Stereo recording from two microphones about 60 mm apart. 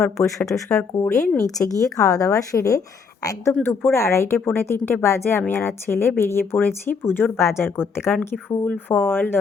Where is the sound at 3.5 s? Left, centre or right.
Left.